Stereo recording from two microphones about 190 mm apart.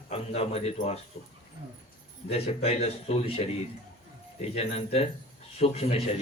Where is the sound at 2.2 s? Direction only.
30° left (ahead or behind).